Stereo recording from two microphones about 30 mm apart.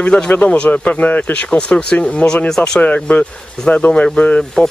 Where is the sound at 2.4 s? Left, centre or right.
Left.